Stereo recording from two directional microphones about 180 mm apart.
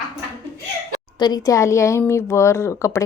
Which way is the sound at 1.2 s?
20° left (ahead or behind).